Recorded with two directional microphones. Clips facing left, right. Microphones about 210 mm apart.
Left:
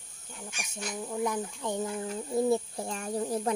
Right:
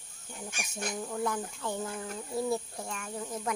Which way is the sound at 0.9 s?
10° left (ahead or behind).